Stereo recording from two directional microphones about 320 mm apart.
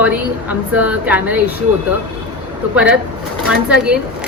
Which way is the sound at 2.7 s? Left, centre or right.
Centre.